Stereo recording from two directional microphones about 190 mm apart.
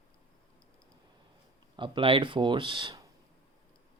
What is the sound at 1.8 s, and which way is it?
Speech, 25° right (ahead or behind).